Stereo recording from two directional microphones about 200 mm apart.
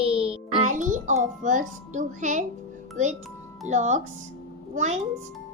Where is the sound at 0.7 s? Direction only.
40° right (ahead or behind).